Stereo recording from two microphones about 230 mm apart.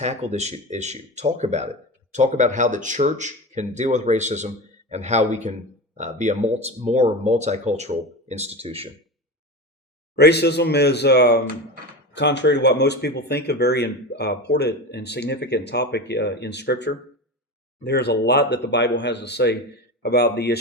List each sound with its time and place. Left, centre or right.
0.0 s speech: right
10.2 s speech: left